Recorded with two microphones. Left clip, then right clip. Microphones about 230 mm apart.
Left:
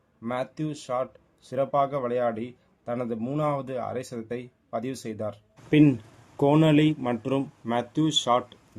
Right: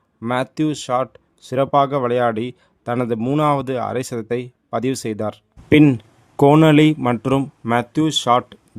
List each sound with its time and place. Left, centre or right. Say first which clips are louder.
0.2 s speech: right 10 dB; right